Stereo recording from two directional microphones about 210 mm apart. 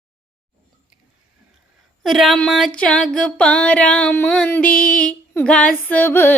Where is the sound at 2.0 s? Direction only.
Centre (ahead or behind).